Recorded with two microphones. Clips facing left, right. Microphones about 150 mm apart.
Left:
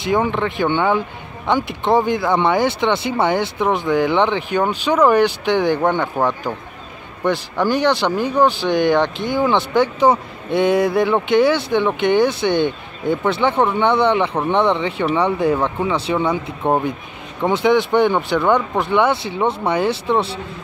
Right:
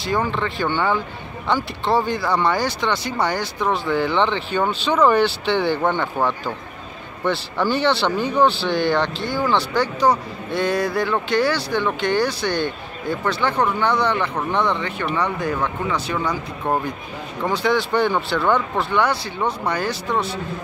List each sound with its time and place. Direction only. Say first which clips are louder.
0.0 s speech: left 4 dB; 20° left (ahead or behind)